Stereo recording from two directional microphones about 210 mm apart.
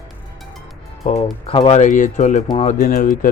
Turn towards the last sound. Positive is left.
turn(degrees=40)  # may be behind; listen again after turning